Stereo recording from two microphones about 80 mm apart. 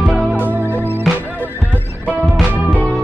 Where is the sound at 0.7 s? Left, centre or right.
Left.